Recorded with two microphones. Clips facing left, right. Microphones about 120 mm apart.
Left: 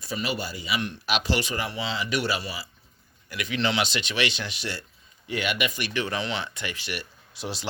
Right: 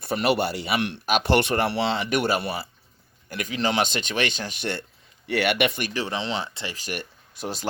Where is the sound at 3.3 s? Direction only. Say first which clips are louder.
Right 1 dB; 45° right (ahead or behind).